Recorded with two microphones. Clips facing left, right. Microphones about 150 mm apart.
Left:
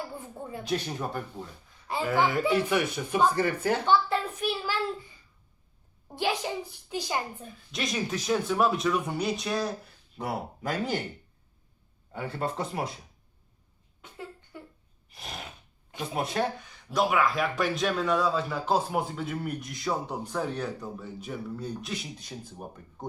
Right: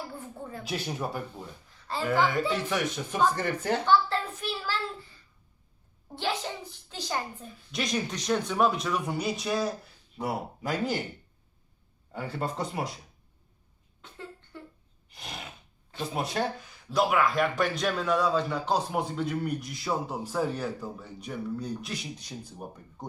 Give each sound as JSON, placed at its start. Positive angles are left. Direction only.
{"t": 0.1, "sound": "a sound", "side_deg": 15}
{"t": 0.6, "sound": "a man's voice", "side_deg": -5}
{"t": 6.1, "sound": "speech", "side_deg": 15}
{"t": 7.7, "sound": "a man's voice", "side_deg": 0}
{"t": 12.1, "sound": "a man's voice", "side_deg": 0}
{"t": 14.0, "sound": "a sound", "side_deg": 10}
{"t": 15.1, "sound": "gasp", "side_deg": 0}
{"t": 16.1, "sound": "a man's voice", "side_deg": 0}